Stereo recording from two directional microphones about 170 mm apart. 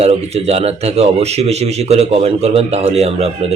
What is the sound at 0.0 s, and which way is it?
Speech, 40° right (ahead or behind).